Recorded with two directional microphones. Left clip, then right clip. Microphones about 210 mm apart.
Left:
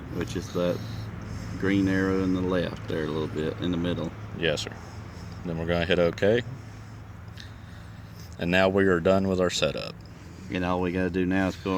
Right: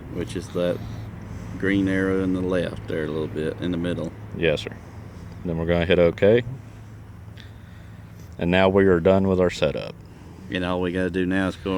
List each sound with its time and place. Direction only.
0.2 s speech: 10° left (ahead or behind)
5.5 s speech: 40° right (ahead or behind)
8.4 s speech: 40° right (ahead or behind)
10.5 s speech: 10° left (ahead or behind)